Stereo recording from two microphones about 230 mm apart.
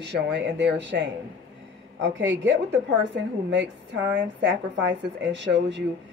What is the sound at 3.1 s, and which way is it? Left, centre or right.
Speech, right.